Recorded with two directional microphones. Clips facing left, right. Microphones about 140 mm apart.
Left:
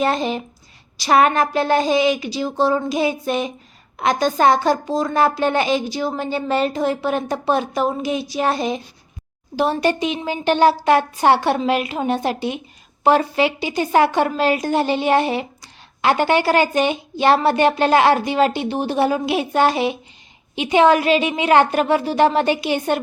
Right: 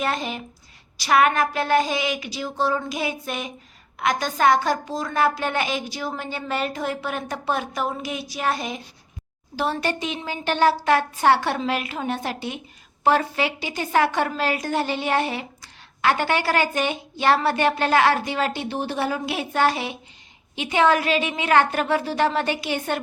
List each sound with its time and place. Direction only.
0.0 s a woman's voice: 30° left (ahead or behind)
9.6 s a woman's voice: 15° left (ahead or behind)